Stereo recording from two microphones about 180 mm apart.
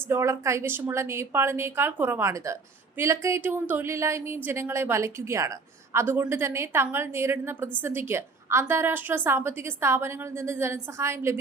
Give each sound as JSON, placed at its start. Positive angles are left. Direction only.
{"t": 0.1, "sound": "a woman's voice", "side_deg": -15}